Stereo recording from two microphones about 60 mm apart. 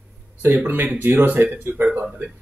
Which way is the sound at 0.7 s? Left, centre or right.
Right.